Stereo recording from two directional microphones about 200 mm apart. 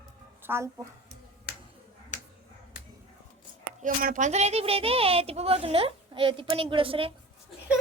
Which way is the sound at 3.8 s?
40° right (ahead or behind).